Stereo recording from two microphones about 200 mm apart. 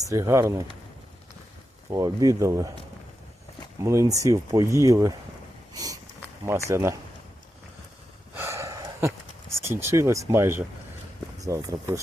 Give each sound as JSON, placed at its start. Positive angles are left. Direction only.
{"t": 0.0, "sound": "speech", "side_deg": -15}
{"t": 1.9, "sound": "speech", "side_deg": -15}
{"t": 3.8, "sound": "speech", "side_deg": -15}
{"t": 5.7, "sound": "a sound", "side_deg": -20}
{"t": 6.4, "sound": "speech", "side_deg": -15}
{"t": 8.4, "sound": "a sound", "side_deg": -15}
{"t": 11.3, "sound": "speech", "side_deg": -15}